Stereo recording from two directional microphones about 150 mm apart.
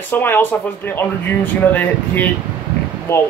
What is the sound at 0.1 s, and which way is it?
Speech, 15° left (ahead or behind).